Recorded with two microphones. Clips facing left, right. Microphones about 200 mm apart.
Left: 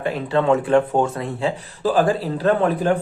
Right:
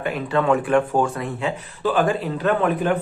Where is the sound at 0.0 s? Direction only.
30° left (ahead or behind).